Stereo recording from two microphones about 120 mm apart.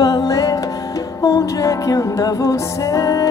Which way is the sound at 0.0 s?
30° left (ahead or behind).